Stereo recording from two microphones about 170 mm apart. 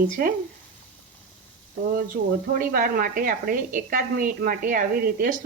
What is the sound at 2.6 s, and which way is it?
A woman's voice, 55° right (ahead or behind).